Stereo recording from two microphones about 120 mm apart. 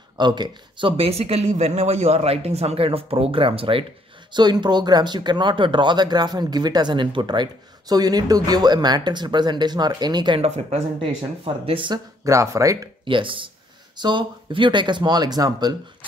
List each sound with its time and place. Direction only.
0.2 s speech: 40° right (ahead or behind)
10.4 s speech: 60° right (ahead or behind)
12.3 s speech: 25° right (ahead or behind)
13.0 s speech: 45° right (ahead or behind)